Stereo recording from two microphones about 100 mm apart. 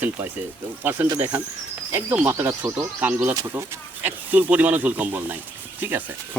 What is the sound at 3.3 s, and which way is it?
Speech, 35° right (ahead or behind).